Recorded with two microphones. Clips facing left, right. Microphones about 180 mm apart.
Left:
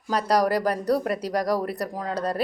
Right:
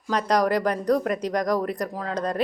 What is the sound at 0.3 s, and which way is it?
Speech, 35° left (ahead or behind).